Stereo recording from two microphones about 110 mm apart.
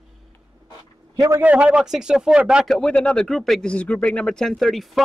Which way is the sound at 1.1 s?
30° right (ahead or behind).